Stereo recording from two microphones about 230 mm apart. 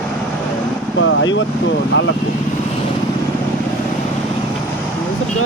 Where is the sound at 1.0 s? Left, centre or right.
Left.